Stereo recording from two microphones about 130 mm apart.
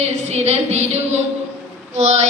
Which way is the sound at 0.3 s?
55° right (ahead or behind).